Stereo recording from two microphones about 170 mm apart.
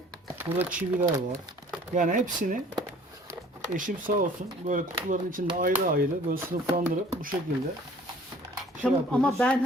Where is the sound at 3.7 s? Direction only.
50° right (ahead or behind).